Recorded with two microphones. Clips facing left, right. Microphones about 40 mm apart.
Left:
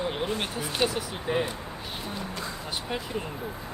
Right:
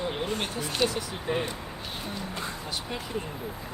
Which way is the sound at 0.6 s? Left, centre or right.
Centre.